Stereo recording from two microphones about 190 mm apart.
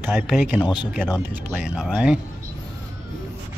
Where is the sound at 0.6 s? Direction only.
25° left (ahead or behind).